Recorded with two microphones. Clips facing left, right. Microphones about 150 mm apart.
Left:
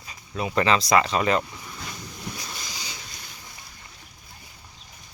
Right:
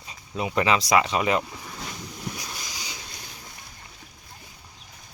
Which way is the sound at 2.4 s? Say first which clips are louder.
Even; 15° right (ahead or behind).